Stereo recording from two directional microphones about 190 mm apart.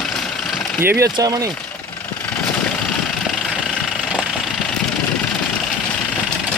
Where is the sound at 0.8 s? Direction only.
15° right (ahead or behind).